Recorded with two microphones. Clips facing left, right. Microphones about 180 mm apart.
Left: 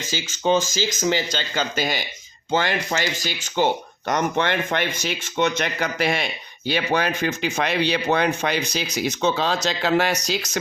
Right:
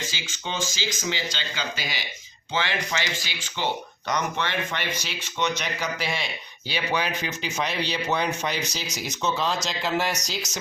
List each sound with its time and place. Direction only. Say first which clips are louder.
0.1 s speech: left 13 dB; 40° left (ahead or behind); by 10.6 s 60° left (ahead or behind)